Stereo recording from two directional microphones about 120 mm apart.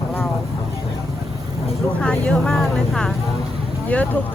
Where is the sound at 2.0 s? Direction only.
10° left (ahead or behind).